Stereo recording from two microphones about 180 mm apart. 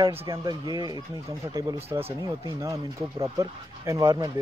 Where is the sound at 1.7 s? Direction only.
35° right (ahead or behind).